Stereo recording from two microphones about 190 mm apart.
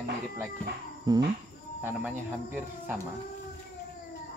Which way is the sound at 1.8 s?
10° right (ahead or behind).